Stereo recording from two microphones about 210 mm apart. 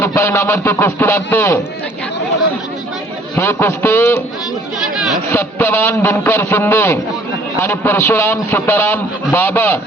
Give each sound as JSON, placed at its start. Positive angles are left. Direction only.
{"t": 0.0, "sound": "a man's voice", "side_deg": 15}
{"t": 3.3, "sound": "a man's voice", "side_deg": 10}